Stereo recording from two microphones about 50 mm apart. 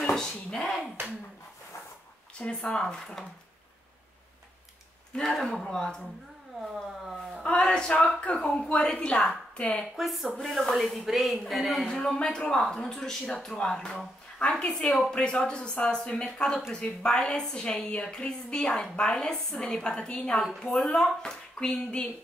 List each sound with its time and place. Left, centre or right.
0.1 s dishes: centre
2.3 s a woman's voice: left
5.2 s speech: centre
5.6 s a woman's voice: centre
6.6 s a sound: centre
7.4 s a woman's voice: centre
9.9 s speech: centre
10.3 s speech: centre
12.1 s a woman's voice: centre